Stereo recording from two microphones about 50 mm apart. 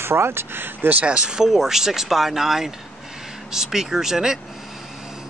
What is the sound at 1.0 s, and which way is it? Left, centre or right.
Speech, centre.